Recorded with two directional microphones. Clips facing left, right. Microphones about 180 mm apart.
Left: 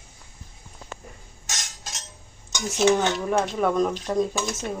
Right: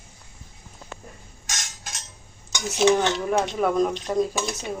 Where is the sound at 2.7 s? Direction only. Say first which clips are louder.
Right 1 dB; 5° right (ahead or behind).